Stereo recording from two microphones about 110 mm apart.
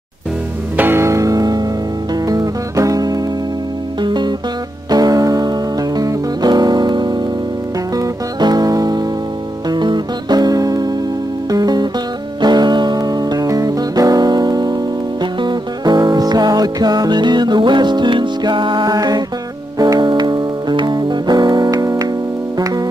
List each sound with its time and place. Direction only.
0.7 s music: 20° right (ahead or behind); by 18.9 s 45° right (ahead or behind)
18.9 s music: 35° right (ahead or behind)